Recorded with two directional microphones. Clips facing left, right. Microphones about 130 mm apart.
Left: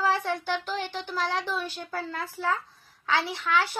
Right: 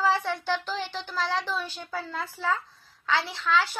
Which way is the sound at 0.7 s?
45° left (ahead or behind).